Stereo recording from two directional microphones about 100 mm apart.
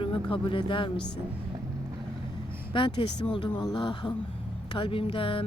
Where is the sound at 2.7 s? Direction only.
55° left (ahead or behind).